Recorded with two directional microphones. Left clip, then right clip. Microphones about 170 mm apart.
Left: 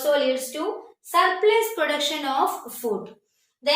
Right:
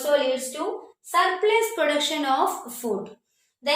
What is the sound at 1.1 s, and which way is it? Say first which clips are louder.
A child's voice: left 2 dB; 10° right (ahead or behind).